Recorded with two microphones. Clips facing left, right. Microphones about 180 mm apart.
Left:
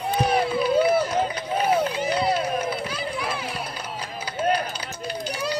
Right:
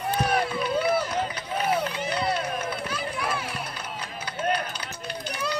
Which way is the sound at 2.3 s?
35° left (ahead or behind).